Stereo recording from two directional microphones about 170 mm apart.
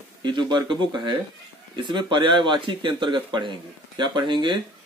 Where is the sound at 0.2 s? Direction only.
25° right (ahead or behind).